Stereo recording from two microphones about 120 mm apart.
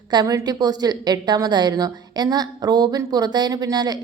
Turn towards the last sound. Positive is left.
turn(degrees=-35)  # may be behind; listen again after turning